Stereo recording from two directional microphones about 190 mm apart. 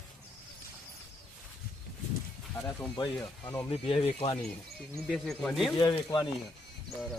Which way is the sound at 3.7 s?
30° left (ahead or behind).